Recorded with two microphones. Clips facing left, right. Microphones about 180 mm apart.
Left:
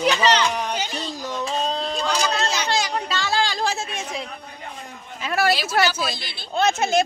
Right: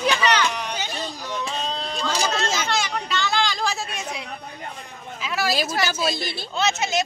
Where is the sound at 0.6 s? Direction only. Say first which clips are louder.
Left 2 dB; 45° left (ahead or behind).